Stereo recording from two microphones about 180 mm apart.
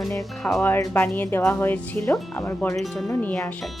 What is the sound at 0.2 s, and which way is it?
Speech, centre (ahead or behind).